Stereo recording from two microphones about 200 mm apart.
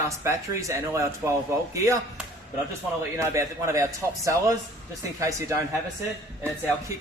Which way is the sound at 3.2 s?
15° right (ahead or behind).